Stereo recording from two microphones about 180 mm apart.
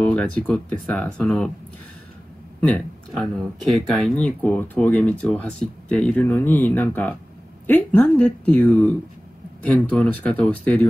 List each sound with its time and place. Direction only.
0.0 s speech: 5° left (ahead or behind)
2.6 s speech: 5° left (ahead or behind)